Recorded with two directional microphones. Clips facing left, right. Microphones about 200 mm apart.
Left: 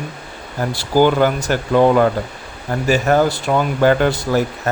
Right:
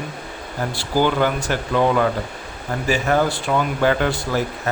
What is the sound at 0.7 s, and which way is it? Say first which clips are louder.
Speech: left 5 dB; 40° left (ahead or behind).